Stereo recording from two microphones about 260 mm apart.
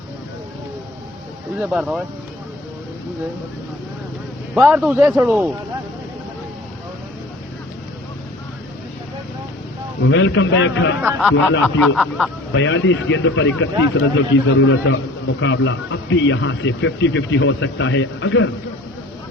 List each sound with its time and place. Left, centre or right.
1.5 s speech: centre
4.5 s a man's voice: centre
10.1 s speech: left
11.0 s speech: centre
12.5 s speech: left